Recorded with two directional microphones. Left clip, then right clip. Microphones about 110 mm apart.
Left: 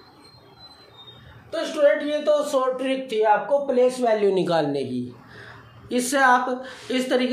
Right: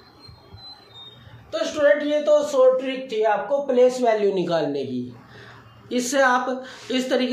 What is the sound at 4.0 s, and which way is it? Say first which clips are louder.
Speech: even; 40° left (ahead or behind).